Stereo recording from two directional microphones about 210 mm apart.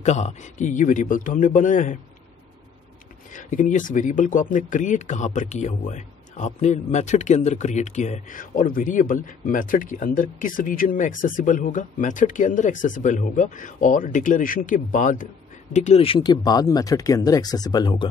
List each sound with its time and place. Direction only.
0.0 s speech: 35° left (ahead or behind)
3.3 s speech: 40° left (ahead or behind); by 18.0 s 20° left (ahead or behind)